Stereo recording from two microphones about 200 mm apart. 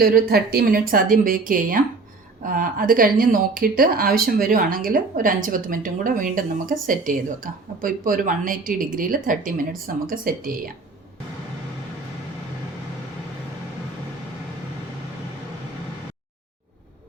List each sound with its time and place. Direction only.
0.0 s speech: 50° right (ahead or behind)